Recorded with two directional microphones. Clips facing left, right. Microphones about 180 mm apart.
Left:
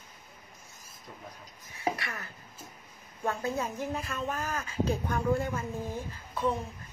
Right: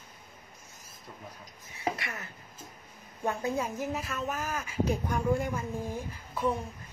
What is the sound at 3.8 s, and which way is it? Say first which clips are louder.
Speech: even; 5° right (ahead or behind).